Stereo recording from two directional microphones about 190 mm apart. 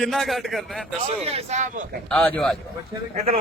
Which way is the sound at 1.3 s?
35° right (ahead or behind).